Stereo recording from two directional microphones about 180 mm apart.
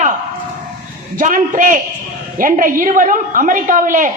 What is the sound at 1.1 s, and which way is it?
A woman's voice, 45° right (ahead or behind).